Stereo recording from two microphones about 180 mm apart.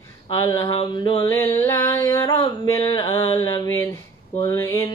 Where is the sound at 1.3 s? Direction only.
15° left (ahead or behind).